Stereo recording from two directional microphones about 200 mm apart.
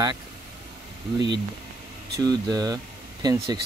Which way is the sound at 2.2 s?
20° right (ahead or behind).